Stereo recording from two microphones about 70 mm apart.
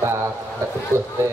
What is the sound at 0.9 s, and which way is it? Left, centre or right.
Speech, right.